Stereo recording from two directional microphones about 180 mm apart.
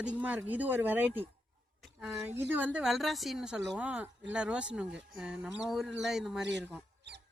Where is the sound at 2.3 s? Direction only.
10° right (ahead or behind).